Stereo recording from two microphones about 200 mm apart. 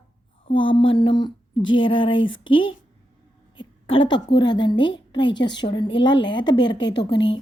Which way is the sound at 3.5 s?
25° left (ahead or behind).